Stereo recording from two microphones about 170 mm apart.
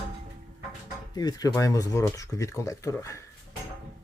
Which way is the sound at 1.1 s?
20° left (ahead or behind).